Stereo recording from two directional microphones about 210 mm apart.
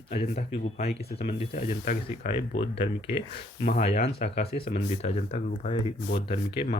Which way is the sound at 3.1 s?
25° left (ahead or behind).